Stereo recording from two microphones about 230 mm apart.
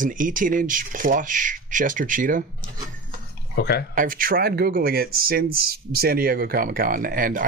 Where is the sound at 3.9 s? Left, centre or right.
Right.